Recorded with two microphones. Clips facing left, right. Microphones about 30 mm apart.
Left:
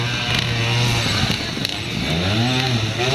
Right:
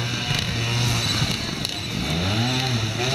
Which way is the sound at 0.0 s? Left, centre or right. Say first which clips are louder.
Left 4 dB; left.